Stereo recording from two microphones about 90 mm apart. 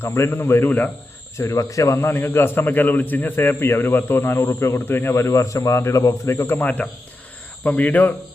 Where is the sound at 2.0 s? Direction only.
25° left (ahead or behind).